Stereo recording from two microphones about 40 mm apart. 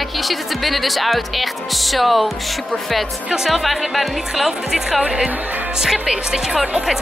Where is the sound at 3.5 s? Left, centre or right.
Centre.